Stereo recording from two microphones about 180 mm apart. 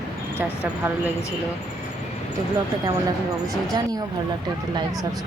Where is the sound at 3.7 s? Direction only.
20° right (ahead or behind).